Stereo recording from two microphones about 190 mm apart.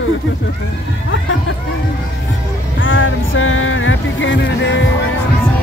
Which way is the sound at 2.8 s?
90° left.